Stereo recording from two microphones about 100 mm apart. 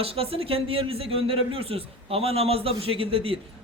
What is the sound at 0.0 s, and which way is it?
A man's voice, 75° right (ahead or behind).